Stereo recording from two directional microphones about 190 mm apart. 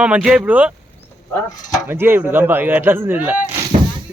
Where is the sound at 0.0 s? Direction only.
5° right (ahead or behind).